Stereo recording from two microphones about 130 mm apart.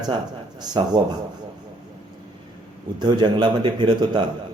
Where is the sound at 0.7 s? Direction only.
35° right (ahead or behind).